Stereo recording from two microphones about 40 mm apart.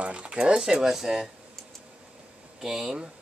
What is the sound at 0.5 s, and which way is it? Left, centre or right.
Speech, centre.